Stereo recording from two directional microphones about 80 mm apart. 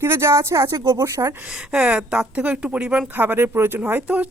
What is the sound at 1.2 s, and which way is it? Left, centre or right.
Speech, right.